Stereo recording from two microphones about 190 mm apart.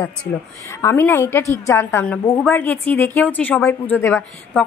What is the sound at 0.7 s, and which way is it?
A woman's voice, 15° left (ahead or behind).